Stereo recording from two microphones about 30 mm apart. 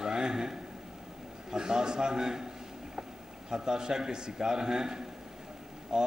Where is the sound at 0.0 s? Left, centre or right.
Right.